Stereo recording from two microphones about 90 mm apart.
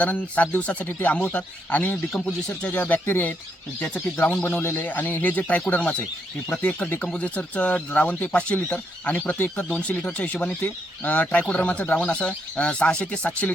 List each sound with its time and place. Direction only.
0.0 s speech: 15° left (ahead or behind)